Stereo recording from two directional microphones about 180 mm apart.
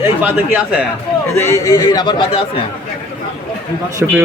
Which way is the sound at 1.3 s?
15° left (ahead or behind).